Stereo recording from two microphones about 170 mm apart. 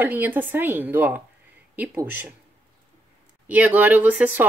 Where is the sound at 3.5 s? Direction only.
10° right (ahead or behind).